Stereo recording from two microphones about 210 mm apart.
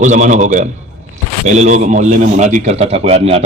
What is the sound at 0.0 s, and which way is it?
A man's voice, 35° right (ahead or behind).